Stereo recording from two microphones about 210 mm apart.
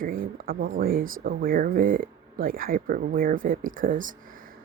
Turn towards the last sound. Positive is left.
turn(degrees=-40)  # may be behind; listen again after turning